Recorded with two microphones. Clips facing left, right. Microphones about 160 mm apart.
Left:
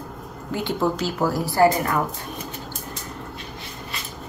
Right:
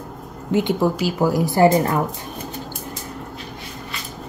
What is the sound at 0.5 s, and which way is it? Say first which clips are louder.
A woman's voice: right 5 dB; 20° right (ahead or behind).